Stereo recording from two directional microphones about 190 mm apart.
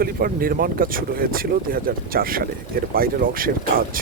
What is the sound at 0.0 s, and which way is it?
Speech, 50° right (ahead or behind).